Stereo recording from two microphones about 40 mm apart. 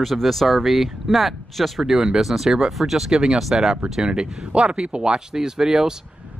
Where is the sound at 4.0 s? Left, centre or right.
Right.